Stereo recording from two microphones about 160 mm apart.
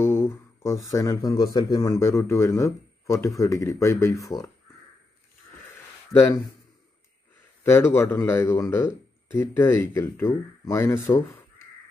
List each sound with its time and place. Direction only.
0.0 s speech: 15° left (ahead or behind)
6.1 s speech: 20° left (ahead or behind)
7.6 s speech: 15° left (ahead or behind)